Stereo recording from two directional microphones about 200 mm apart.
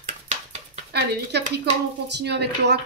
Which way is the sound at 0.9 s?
55° right (ahead or behind).